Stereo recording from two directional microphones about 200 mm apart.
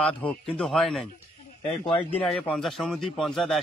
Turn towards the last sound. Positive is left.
turn(degrees=0)  # may be behind; listen again after turning